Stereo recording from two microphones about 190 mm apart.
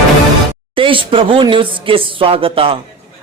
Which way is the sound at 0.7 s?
25° right (ahead or behind).